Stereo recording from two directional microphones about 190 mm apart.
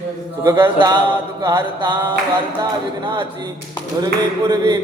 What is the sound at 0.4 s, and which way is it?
Music, 10° right (ahead or behind).